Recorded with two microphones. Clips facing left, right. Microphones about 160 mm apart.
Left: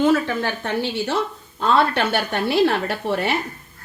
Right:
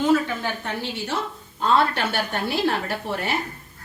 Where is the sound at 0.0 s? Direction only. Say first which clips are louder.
Left 2 dB; 70° left (ahead or behind).